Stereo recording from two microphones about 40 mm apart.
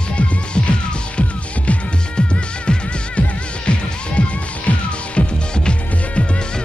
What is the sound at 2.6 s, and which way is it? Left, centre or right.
Music, left.